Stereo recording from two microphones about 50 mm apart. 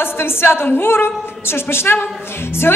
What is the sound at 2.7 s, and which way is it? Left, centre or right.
Speech, left.